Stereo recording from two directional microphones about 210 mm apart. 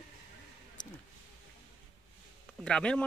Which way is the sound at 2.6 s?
5° left (ahead or behind).